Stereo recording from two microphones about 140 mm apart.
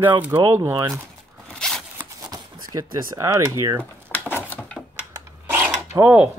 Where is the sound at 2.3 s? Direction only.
25° right (ahead or behind).